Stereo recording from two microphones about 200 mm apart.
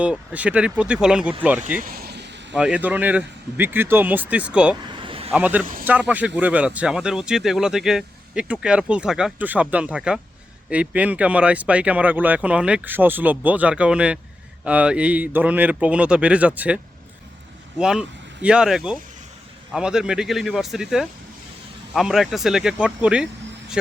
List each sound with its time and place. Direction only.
0.0 s speech: 5° right (ahead or behind)
1.8 s vehicle: 50° right (ahead or behind)
2.6 s speech: 5° right (ahead or behind)
5.0 s a sound: 25° right (ahead or behind)
5.3 s speech: 10° right (ahead or behind)